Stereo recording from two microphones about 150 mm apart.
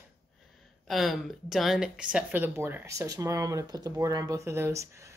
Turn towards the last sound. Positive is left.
turn(degrees=-20)  # may be behind; listen again after turning